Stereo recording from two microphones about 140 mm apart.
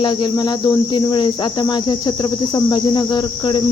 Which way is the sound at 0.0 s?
35° left (ahead or behind).